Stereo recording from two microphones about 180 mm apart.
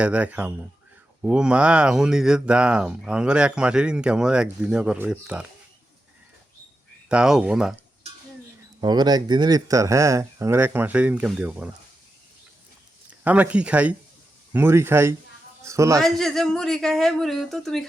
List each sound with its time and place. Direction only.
0.0 s speech: 5° right (ahead or behind)
7.1 s speech: 5° right (ahead or behind)
8.8 s speech: 25° right (ahead or behind); by 11.7 s 10° right (ahead or behind)
13.1 s speech: 10° right (ahead or behind)
16.0 s speech: centre (ahead or behind)